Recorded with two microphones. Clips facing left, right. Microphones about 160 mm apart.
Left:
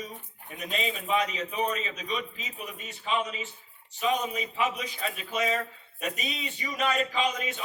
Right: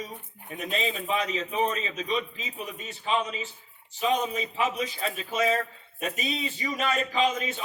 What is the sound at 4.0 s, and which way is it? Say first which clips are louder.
Speech: right 2 dB; 25° right (ahead or behind).